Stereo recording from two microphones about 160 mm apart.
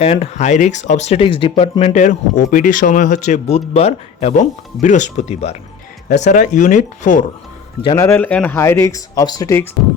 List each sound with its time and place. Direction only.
0.0 s speech: 40° left (ahead or behind)
1.8 s speech: 50° left (ahead or behind)
7.9 s speech: 15° left (ahead or behind)